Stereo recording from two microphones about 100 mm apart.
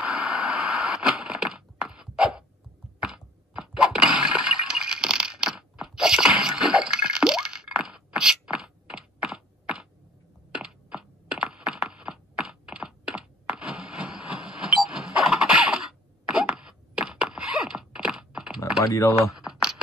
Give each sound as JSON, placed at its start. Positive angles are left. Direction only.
{"t": 0.0, "sound": "a sound", "side_deg": -5}
{"t": 3.0, "sound": "breaking", "side_deg": -5}
{"t": 10.5, "sound": "computer keyboard", "side_deg": -10}
{"t": 18.9, "sound": "speech", "side_deg": 30}
{"t": 19.3, "sound": "computer keyboard", "side_deg": -5}